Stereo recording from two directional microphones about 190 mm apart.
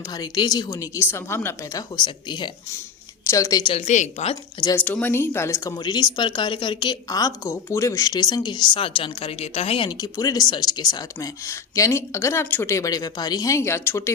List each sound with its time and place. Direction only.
0.1 s speech: 20° left (ahead or behind)
2.0 s a woman's voice: 25° left (ahead or behind)
3.8 s a woman's voice: 40° left (ahead or behind)
4.6 s a woman's voice: 10° left (ahead or behind)